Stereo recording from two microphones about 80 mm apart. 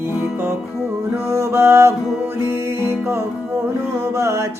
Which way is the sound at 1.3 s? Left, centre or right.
Right.